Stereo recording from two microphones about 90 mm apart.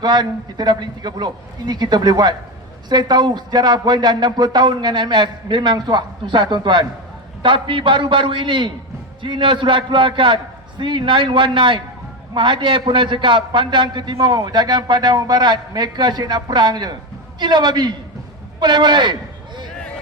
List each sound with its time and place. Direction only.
0.0 s a man's voice: 50° right (ahead or behind)